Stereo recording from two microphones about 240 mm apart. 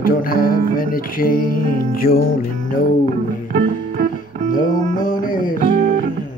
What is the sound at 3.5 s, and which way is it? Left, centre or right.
Music, right.